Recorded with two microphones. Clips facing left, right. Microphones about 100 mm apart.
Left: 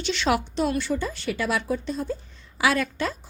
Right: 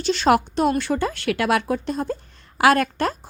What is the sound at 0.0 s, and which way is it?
A woman's voice, 40° right (ahead or behind).